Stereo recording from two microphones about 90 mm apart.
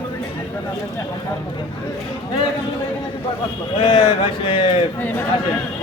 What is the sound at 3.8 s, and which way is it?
Speech, 65° left (ahead or behind).